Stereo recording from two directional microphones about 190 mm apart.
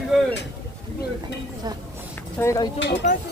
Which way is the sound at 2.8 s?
70° left (ahead or behind).